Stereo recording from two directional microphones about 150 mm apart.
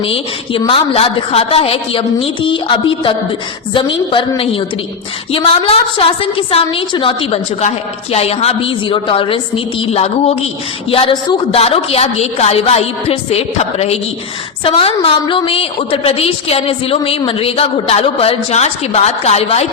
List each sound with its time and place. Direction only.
0.0 s a woman's voice: 35° left (ahead or behind)